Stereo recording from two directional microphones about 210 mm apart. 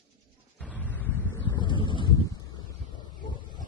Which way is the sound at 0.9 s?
10° left (ahead or behind).